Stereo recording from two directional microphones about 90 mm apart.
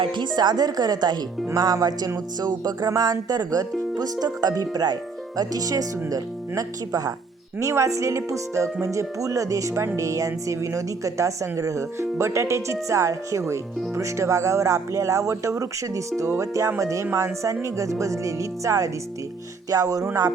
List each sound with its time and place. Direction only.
0.0 s music: 60° right (ahead or behind); by 7.1 s 40° right (ahead or behind)
7.6 s speech: 35° right (ahead or behind)